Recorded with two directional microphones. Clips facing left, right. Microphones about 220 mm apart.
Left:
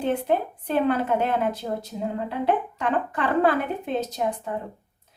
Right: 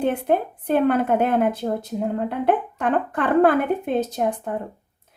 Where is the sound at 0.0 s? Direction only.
55° right (ahead or behind).